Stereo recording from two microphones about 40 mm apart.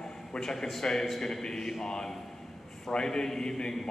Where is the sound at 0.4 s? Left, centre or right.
Centre.